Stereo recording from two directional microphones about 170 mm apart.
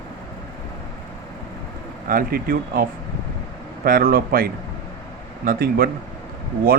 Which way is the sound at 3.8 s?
60° right (ahead or behind).